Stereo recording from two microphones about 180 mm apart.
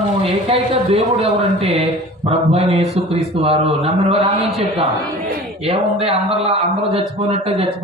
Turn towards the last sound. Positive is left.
turn(degrees=-30)  # may be behind; listen again after turning